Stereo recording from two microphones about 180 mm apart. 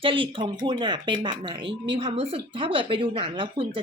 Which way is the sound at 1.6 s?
75° right (ahead or behind).